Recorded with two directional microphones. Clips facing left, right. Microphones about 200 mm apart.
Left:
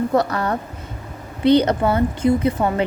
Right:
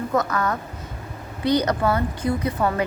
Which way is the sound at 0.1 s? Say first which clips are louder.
Left 3 dB; 35° left (ahead or behind).